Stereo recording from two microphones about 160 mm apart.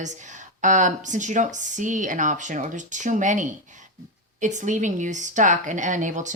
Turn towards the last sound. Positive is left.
turn(degrees=-50)  # may be behind; listen again after turning